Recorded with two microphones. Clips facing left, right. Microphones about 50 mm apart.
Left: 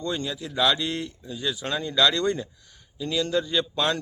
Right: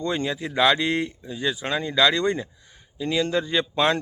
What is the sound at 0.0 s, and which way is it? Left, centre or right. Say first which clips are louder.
A man's voice: right 4 dB; right.